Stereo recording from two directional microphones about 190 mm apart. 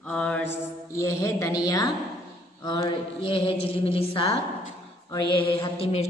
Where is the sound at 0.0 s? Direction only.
5° left (ahead or behind).